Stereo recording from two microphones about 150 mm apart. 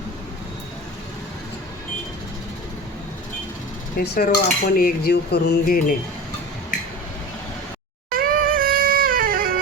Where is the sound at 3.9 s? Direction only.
90° left.